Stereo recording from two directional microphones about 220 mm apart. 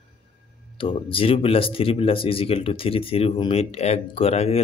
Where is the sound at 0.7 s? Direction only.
25° left (ahead or behind).